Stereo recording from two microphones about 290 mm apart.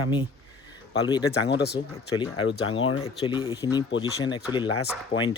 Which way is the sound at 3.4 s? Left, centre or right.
Centre.